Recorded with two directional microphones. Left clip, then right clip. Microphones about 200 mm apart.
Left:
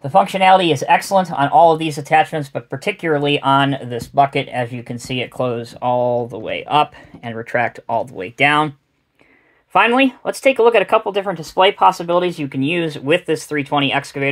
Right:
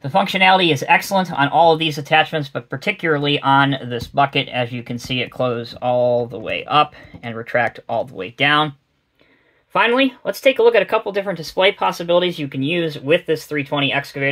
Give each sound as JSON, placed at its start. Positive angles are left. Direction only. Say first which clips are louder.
{"t": 0.0, "sound": "speech", "louder": "left 2 dB", "side_deg": 35}
{"t": 12.2, "sound": "speech", "louder": "left 1 dB", "side_deg": 35}